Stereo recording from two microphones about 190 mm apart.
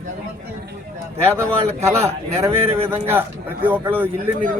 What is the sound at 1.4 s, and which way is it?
A man's voice, 15° right (ahead or behind).